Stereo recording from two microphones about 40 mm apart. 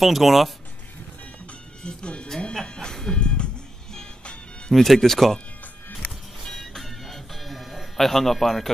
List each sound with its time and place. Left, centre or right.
0.0 s speech: centre
1.8 s speech: left
2.5 s music: centre
4.7 s speech: centre
6.4 s music: centre